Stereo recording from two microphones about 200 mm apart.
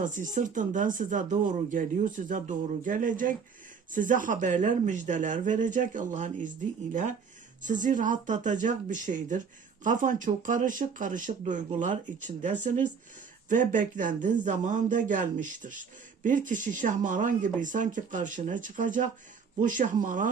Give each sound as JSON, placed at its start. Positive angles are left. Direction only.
{"t": 0.0, "sound": "speech", "side_deg": -40}
{"t": 7.6, "sound": "speech", "side_deg": -40}